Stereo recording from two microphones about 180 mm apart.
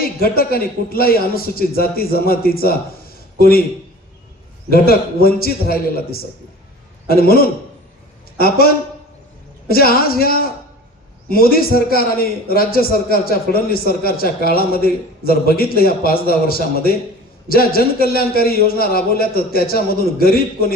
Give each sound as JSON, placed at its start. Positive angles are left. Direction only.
{"t": 0.2, "sound": "a man's voice", "side_deg": 55}
{"t": 4.7, "sound": "a man's voice", "side_deg": 55}
{"t": 9.6, "sound": "a man's voice", "side_deg": 55}